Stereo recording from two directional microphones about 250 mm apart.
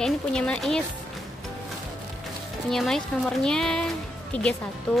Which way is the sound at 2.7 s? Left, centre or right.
Centre.